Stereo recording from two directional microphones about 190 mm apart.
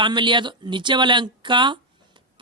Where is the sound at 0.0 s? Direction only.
25° right (ahead or behind).